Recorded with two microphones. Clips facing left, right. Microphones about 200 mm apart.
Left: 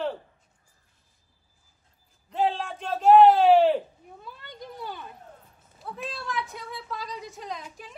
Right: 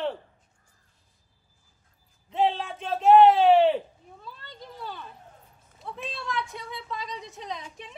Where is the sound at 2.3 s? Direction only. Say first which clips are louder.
Right 1 dB; centre (ahead or behind).